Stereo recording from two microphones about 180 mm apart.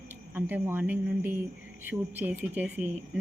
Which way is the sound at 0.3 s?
10° right (ahead or behind).